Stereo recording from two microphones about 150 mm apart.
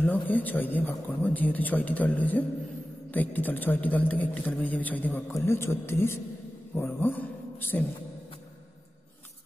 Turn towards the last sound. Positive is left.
turn(degrees=10)  # may be behind; listen again after turning